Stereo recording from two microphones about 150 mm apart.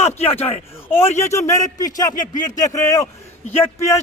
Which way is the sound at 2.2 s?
60° left (ahead or behind).